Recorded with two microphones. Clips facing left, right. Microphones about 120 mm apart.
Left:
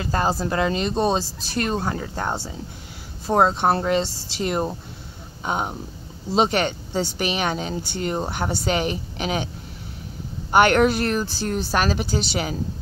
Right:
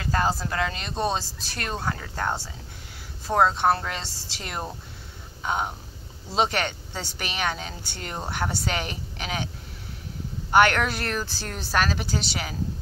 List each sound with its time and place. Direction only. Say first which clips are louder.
0.0 s speech: left 3 dB; 25° left (ahead or behind)
10.5 s speech: left 4 dB; 20° left (ahead or behind)